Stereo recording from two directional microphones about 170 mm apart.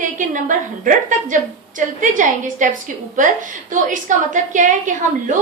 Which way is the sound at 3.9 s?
50° right (ahead or behind).